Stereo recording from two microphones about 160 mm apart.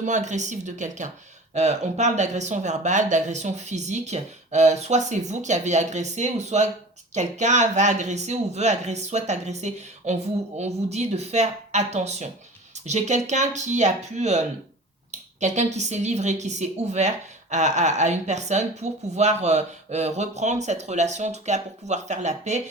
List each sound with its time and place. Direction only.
0.0 s a woman's voice: 50° right (ahead or behind)